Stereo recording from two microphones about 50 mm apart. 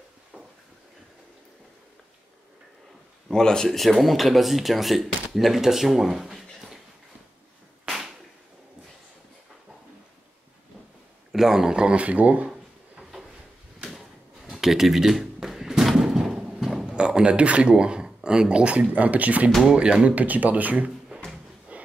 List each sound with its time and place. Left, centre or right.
3.3 s speech: centre
3.8 s speech: centre
11.3 s speech: centre; by 12.4 s right
13.8 s a sound: centre
16.8 s speech: centre
19.8 s speech: right
20.2 s speech: right
21.7 s a sound: right